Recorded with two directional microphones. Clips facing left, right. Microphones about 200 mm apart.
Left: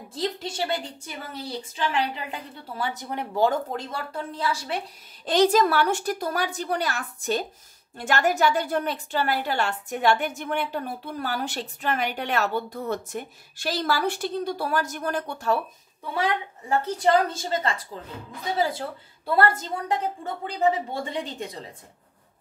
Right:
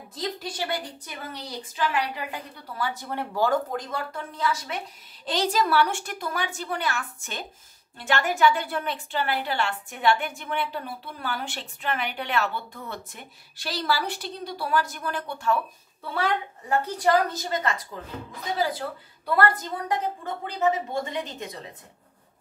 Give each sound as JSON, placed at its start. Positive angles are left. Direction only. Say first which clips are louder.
{"t": 0.1, "sound": "speech", "louder": "left 3 dB", "side_deg": 25}
{"t": 5.2, "sound": "a woman's voice", "louder": "left 6 dB", "side_deg": 50}
{"t": 16.1, "sound": "a woman's voice", "louder": "left 1 dB", "side_deg": 15}